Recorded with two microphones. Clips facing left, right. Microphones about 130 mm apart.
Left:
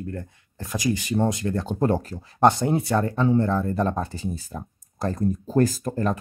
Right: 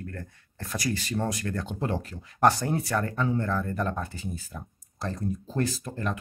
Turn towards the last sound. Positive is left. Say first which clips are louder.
# left 7 dB
turn(degrees=40)  # may be behind; listen again after turning